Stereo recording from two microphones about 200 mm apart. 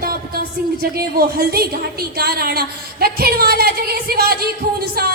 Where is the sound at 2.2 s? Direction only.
50° right (ahead or behind).